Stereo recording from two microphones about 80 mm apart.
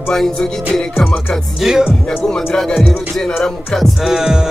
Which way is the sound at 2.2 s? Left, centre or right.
Centre.